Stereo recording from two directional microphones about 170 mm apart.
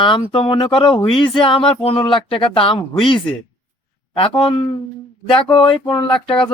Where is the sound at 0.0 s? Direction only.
30° left (ahead or behind).